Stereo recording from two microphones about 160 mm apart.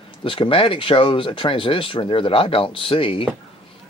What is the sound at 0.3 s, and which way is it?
Speech, 35° left (ahead or behind).